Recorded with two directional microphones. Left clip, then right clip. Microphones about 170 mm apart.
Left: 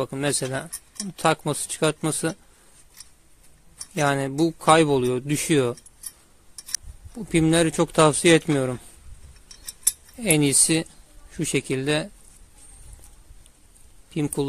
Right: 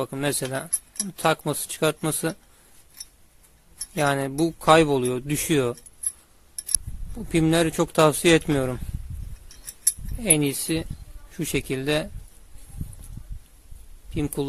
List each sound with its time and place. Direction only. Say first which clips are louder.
0.0 s speech: left 1 dB; 10° left (ahead or behind)
3.9 s speech: even; 10° left (ahead or behind)
7.2 s speech: left 1 dB; 10° left (ahead or behind)
10.1 s speech: left 3 dB; 20° left (ahead or behind)
11.2 s speech: left 2 dB; 10° left (ahead or behind)
14.1 s speech: left 2 dB; 15° left (ahead or behind)